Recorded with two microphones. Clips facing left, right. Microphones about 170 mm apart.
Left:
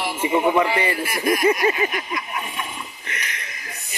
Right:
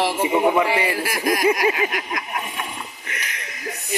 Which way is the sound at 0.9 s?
90° right.